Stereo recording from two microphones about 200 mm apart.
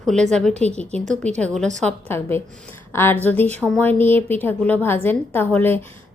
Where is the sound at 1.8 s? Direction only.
10° left (ahead or behind).